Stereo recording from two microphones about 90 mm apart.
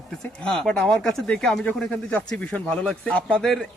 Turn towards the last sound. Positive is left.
turn(degrees=5)  # may be behind; listen again after turning